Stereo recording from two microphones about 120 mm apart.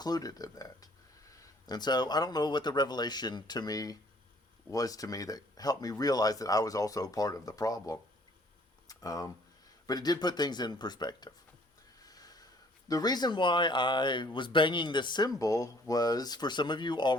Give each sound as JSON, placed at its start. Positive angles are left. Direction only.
{"t": 0.0, "sound": "speech", "side_deg": 30}
{"t": 12.0, "sound": "snort", "side_deg": 30}
{"t": 12.9, "sound": "speech", "side_deg": 35}